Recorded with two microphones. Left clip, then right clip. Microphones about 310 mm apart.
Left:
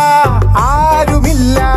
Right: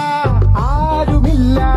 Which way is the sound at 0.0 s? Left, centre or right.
Left.